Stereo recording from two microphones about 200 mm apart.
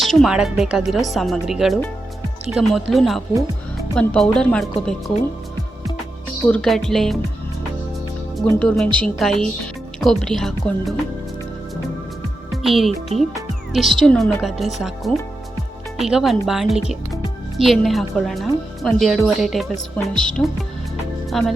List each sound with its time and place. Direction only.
0.0 s speech: centre (ahead or behind)
6.4 s speech: 5° left (ahead or behind)
8.4 s speech: 5° left (ahead or behind)
12.6 s speech: centre (ahead or behind)
13.1 s speech: 30° right (ahead or behind)
13.7 s speech: centre (ahead or behind)
21.2 s music: centre (ahead or behind)